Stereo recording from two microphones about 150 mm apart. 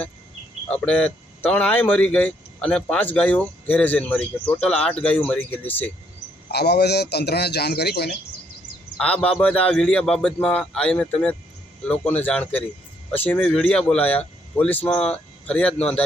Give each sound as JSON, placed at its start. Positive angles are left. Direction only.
{"t": 0.7, "sound": "speech", "side_deg": 5}
{"t": 6.5, "sound": "a man's voice", "side_deg": 90}
{"t": 9.0, "sound": "speech", "side_deg": 10}